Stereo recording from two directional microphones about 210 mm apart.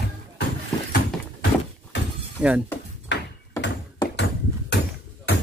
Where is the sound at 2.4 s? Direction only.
5° right (ahead or behind).